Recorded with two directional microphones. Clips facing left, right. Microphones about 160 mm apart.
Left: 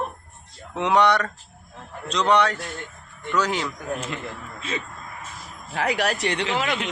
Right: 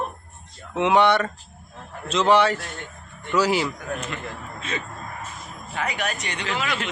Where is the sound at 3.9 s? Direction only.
30° left (ahead or behind).